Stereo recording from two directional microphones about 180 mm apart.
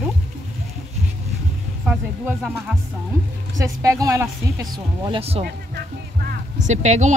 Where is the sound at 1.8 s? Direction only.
5° right (ahead or behind).